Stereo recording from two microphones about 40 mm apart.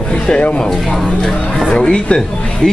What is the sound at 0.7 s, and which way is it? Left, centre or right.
Speech, centre.